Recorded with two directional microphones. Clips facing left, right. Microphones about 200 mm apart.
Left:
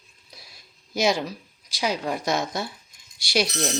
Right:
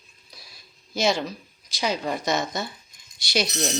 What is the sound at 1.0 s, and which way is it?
Speech, 15° left (ahead or behind).